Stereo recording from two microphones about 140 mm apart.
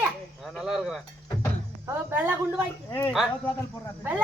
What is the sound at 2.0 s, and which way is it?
Speech, 15° right (ahead or behind).